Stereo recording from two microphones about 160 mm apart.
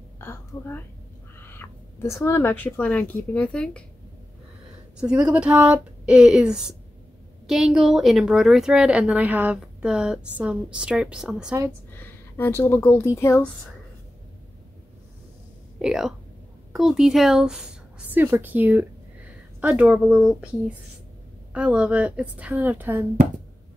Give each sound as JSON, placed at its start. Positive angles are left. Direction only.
{"t": 0.2, "sound": "a woman's voice", "side_deg": 15}
{"t": 4.9, "sound": "a woman's voice", "side_deg": -5}
{"t": 12.0, "sound": "speech", "side_deg": 15}
{"t": 15.8, "sound": "a woman's voice", "side_deg": 0}
{"t": 21.5, "sound": "a woman's voice", "side_deg": -5}